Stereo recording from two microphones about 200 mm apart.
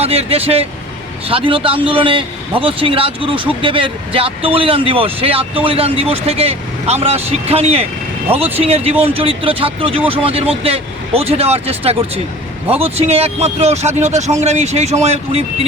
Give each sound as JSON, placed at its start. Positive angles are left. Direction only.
{"t": 0.0, "sound": "speech", "side_deg": -30}